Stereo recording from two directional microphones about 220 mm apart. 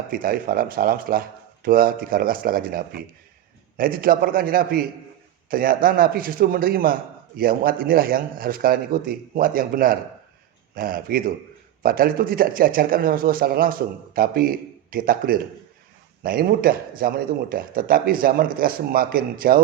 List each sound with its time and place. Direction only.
0.1 s a man's voice: 40° right (ahead or behind)